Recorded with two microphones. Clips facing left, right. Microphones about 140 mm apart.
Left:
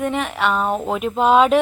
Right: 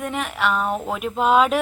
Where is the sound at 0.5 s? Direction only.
30° left (ahead or behind).